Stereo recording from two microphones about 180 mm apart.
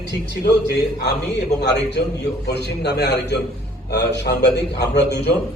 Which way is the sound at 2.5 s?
65° left (ahead or behind).